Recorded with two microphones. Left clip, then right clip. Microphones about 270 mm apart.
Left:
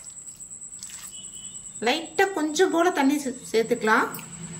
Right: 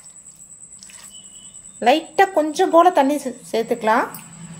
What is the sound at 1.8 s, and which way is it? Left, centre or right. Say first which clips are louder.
A woman's voice: right 8 dB; centre.